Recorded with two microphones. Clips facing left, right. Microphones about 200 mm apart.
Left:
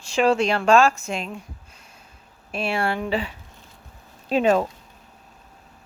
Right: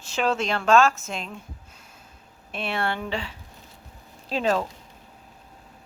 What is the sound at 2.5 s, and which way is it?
Speech, centre (ahead or behind).